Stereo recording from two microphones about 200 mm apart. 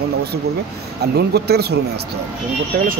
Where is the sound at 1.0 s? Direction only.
55° right (ahead or behind).